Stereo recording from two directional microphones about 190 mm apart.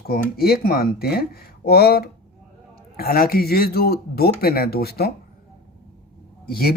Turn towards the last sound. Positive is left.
turn(degrees=55)  # may be behind; listen again after turning